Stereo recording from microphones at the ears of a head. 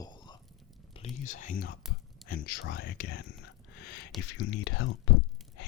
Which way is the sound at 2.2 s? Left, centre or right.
Left.